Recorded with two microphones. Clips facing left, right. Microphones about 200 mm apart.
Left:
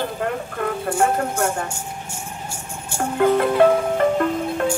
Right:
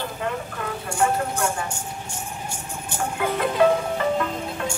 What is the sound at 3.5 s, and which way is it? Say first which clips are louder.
Marimba: left 4 dB; 50° left (ahead or behind).